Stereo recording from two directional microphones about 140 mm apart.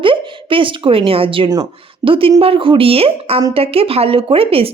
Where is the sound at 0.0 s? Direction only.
40° right (ahead or behind).